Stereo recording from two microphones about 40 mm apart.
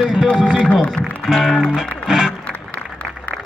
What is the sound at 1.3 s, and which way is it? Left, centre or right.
Speech, centre.